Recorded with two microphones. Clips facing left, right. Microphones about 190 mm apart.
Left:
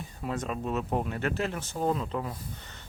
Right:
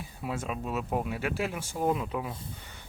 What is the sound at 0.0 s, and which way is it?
Speech, 5° right (ahead or behind).